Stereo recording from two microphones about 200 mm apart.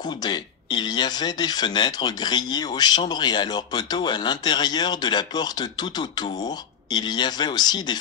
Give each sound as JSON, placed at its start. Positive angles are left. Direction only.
{"t": 0.0, "sound": "speech", "side_deg": 20}